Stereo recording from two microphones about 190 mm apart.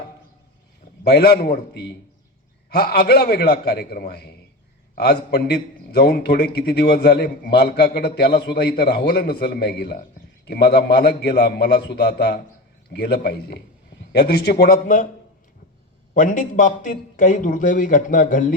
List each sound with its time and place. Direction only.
1.0 s a man's voice: 60° left (ahead or behind)
16.1 s a man's voice: 45° left (ahead or behind)